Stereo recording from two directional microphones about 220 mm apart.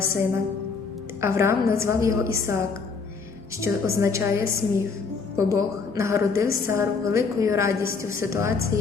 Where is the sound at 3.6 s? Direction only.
15° right (ahead or behind).